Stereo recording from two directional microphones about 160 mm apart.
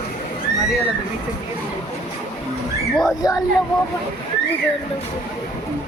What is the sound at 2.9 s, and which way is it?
Speech, centre (ahead or behind).